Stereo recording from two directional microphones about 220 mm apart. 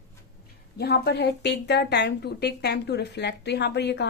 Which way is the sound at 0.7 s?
45° left (ahead or behind).